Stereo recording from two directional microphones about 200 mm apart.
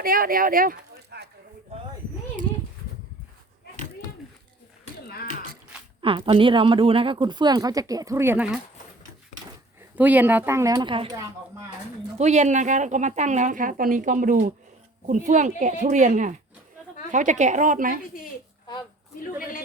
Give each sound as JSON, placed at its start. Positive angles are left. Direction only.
{"t": 0.0, "sound": "speech", "side_deg": -45}
{"t": 5.0, "sound": "a sound", "side_deg": 50}
{"t": 6.0, "sound": "speech", "side_deg": -25}
{"t": 9.9, "sound": "a woman's voice", "side_deg": -10}